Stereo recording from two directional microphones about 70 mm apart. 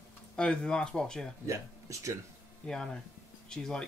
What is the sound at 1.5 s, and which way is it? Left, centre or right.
Speech, right.